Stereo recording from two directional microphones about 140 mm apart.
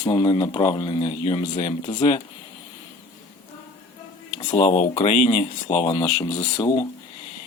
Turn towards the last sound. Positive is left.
turn(degrees=30)  # may be behind; listen again after turning